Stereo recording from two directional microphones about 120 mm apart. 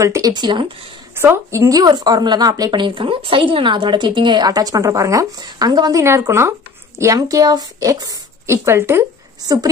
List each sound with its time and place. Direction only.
0.0 s a woman's voice: 30° right (ahead or behind)
1.1 s a woman's voice: 20° right (ahead or behind)